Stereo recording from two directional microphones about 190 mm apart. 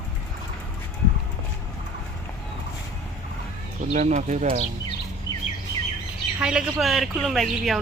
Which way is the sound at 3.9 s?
40° right (ahead or behind).